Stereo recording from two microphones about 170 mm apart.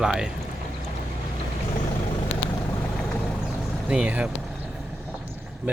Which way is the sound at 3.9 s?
5° right (ahead or behind).